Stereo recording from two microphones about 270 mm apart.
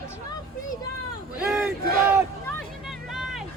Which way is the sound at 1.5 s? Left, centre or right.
Centre.